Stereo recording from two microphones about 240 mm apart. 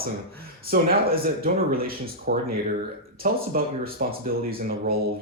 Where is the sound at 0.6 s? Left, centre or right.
Right.